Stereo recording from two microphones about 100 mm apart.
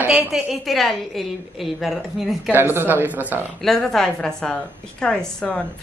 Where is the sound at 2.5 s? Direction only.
20° right (ahead or behind).